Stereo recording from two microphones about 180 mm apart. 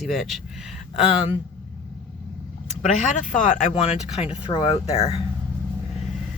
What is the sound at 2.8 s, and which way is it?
Speech, 45° left (ahead or behind).